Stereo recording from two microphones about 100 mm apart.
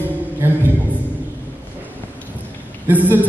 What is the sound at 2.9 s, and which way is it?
Speech, 20° right (ahead or behind).